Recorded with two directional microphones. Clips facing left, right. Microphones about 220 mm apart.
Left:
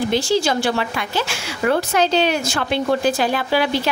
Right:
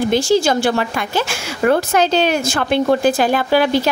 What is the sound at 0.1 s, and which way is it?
A woman's voice, 45° right (ahead or behind).